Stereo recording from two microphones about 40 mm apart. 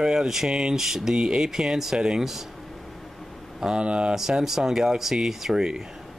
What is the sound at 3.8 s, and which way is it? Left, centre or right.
Speech, right.